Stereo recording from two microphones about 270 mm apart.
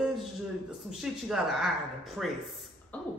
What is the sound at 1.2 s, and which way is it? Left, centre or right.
Speech, centre.